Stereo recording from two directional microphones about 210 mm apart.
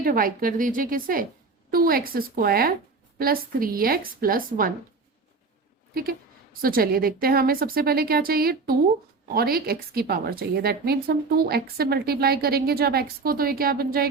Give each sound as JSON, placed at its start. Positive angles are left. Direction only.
{"t": 0.0, "sound": "a woman's voice", "side_deg": -45}
{"t": 5.9, "sound": "a woman's voice", "side_deg": -45}